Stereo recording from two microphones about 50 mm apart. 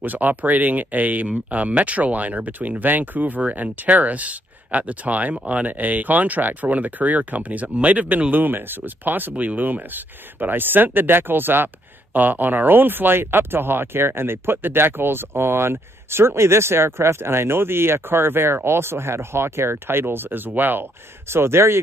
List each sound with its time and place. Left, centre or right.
0.0 s speech: right